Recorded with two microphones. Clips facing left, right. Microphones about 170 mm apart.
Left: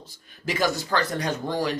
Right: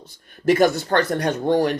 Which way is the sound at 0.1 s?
60° right (ahead or behind).